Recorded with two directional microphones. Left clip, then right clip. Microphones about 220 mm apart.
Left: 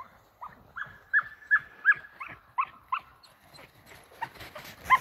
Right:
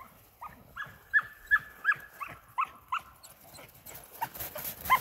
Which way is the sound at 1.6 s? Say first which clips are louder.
Left 7 dB; 45° right (ahead or behind).